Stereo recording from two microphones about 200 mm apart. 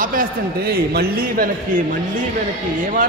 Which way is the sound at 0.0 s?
45° right (ahead or behind).